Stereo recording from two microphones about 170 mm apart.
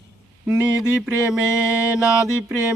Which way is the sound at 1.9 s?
5° right (ahead or behind).